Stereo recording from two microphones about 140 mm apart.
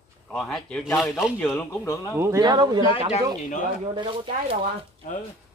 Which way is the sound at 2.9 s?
50° left (ahead or behind).